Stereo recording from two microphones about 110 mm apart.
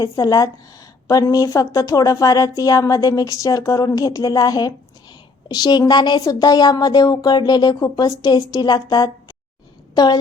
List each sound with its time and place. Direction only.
0.0 s a woman's voice: 35° left (ahead or behind)